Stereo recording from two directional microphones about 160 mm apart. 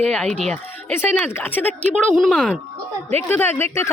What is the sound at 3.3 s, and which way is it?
Speech, 15° left (ahead or behind).